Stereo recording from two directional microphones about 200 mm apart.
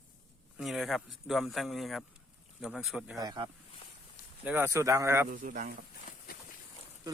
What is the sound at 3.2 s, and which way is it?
Speech, 20° right (ahead or behind).